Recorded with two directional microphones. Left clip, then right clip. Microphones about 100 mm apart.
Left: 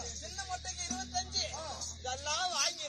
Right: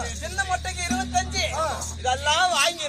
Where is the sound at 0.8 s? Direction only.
35° right (ahead or behind).